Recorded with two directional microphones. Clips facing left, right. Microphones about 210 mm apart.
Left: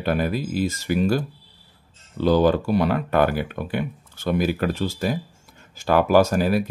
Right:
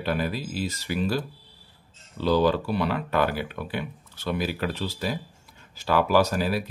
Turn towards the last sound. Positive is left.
turn(degrees=50)  # may be behind; listen again after turning